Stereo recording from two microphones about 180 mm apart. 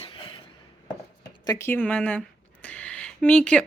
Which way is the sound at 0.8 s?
20° left (ahead or behind).